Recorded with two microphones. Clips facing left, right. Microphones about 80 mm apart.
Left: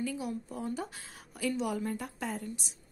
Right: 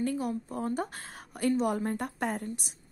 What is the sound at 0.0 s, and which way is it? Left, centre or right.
A woman's voice, right.